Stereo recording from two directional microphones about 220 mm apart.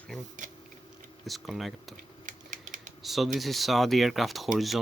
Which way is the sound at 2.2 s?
35° right (ahead or behind).